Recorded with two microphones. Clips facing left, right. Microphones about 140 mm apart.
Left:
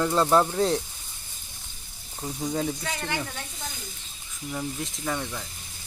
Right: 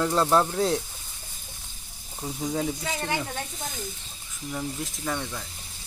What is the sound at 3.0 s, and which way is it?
Speech, 20° right (ahead or behind).